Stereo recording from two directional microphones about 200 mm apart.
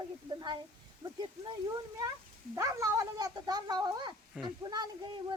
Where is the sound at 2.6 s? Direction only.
15° right (ahead or behind).